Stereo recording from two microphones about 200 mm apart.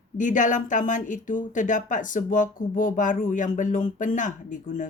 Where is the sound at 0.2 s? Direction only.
40° left (ahead or behind).